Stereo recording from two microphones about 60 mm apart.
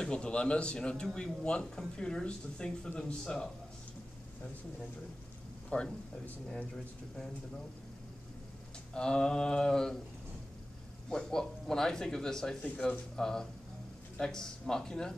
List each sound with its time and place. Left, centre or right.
0.0 s speech: centre
5.7 s speech: centre
8.9 s speech: centre
11.1 s speech: centre